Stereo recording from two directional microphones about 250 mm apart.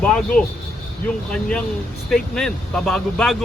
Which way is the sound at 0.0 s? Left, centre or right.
Centre.